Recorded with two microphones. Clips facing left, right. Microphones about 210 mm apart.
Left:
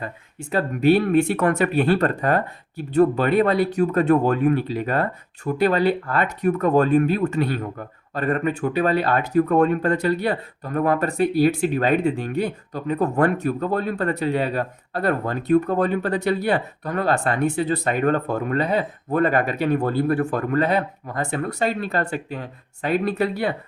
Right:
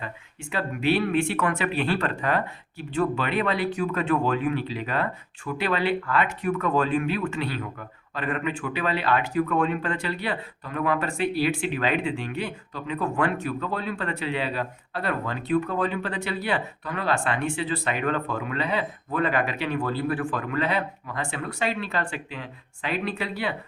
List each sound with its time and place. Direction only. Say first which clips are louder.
0.0 s speech: left 4 dB; 40° left (ahead or behind)